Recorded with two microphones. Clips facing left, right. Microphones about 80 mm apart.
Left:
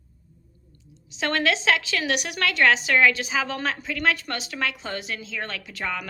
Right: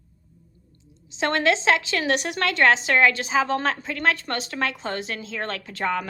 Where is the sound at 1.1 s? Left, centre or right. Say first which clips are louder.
Right 2 dB; right.